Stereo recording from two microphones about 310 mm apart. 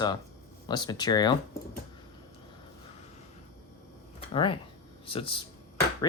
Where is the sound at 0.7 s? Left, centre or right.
Centre.